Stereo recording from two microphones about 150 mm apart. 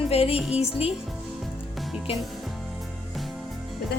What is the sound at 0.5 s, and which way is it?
Speech, 40° left (ahead or behind).